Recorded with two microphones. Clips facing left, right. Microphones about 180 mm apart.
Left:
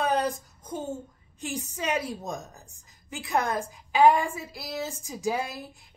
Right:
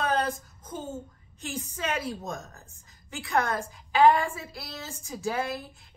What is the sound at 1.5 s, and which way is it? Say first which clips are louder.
Speech: left 2 dB; 15° left (ahead or behind).